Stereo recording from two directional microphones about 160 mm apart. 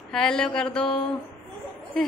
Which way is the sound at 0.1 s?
5° left (ahead or behind).